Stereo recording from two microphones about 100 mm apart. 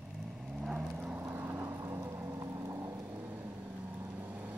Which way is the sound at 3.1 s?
15° right (ahead or behind).